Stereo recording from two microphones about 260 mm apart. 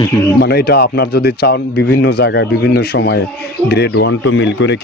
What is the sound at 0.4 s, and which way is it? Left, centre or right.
A man's voice, left.